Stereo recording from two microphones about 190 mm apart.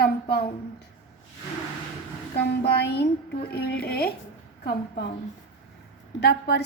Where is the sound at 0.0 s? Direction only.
55° left (ahead or behind).